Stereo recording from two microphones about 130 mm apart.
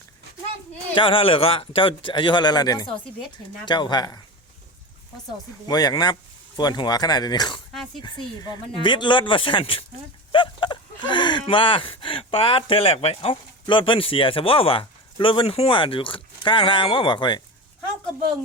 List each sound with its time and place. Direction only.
0.9 s speech: 40° left (ahead or behind)
5.6 s speech: 30° left (ahead or behind)
10.3 s a sound: 40° left (ahead or behind)
11.4 s speech: 40° left (ahead or behind)